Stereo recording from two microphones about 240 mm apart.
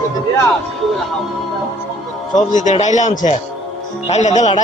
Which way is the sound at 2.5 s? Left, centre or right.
Left.